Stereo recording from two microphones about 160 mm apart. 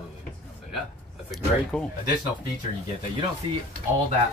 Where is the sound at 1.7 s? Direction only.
10° left (ahead or behind).